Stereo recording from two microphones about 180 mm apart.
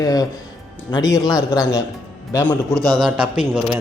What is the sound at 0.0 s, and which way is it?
Speech, 20° left (ahead or behind).